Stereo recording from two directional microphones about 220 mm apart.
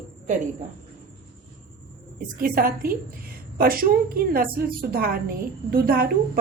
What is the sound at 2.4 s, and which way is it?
A woman's voice, 40° right (ahead or behind).